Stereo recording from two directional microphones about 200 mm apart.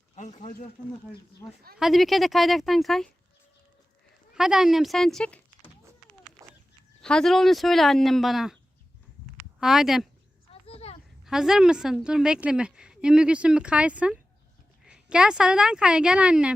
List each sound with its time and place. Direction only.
0.2 s speech: 40° left (ahead or behind)
1.8 s a woman's voice: centre (ahead or behind)
4.4 s a woman's voice: centre (ahead or behind)
7.0 s a woman's voice: 5° left (ahead or behind)
9.6 s a woman's voice: centre (ahead or behind)
10.5 s a sound: 30° left (ahead or behind)
11.3 s a woman's voice: centre (ahead or behind)